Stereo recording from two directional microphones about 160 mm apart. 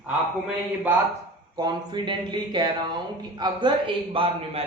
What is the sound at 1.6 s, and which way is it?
Speech, 25° right (ahead or behind).